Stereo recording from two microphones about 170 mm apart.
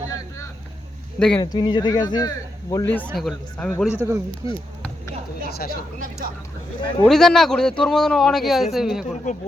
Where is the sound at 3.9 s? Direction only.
15° right (ahead or behind).